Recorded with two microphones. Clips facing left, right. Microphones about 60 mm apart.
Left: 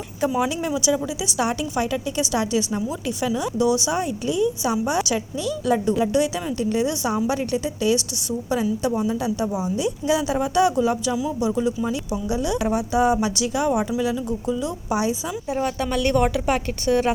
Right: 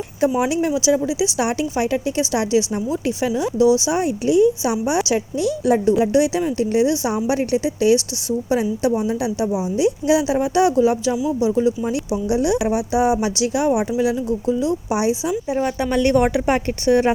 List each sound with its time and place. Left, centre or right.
0.2 s a woman's voice: right